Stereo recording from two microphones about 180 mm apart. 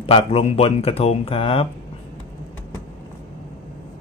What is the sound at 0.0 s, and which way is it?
Speech, 30° left (ahead or behind).